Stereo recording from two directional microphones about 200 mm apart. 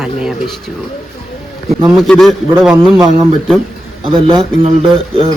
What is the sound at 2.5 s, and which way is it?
Speech, 10° right (ahead or behind).